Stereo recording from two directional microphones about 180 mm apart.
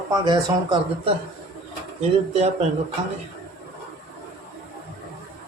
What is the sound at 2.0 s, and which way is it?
Speech, 35° right (ahead or behind).